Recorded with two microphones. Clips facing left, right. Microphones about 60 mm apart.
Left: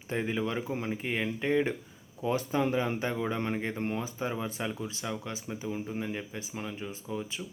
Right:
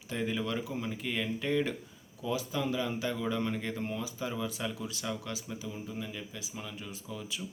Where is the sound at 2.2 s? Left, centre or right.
Left.